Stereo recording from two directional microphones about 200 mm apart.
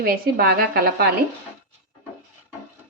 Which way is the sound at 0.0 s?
50° right (ahead or behind).